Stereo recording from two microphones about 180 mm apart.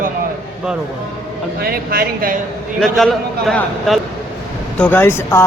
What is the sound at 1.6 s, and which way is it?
Speech, 55° right (ahead or behind).